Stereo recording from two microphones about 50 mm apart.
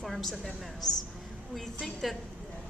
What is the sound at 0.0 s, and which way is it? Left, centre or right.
A woman's voice, centre.